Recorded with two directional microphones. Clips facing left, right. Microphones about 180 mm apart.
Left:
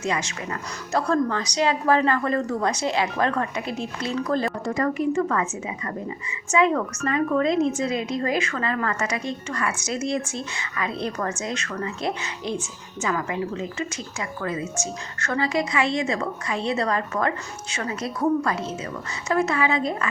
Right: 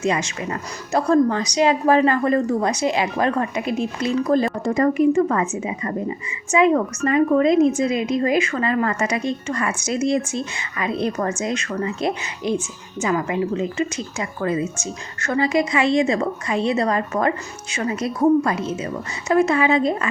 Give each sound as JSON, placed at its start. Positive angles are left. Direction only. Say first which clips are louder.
{"t": 0.0, "sound": "a woman's voice", "louder": "right 5 dB", "side_deg": -20}